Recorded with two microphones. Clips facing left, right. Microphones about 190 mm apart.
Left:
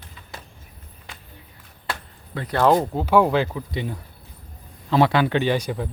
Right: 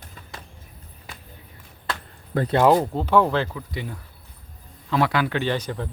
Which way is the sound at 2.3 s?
50° right (ahead or behind).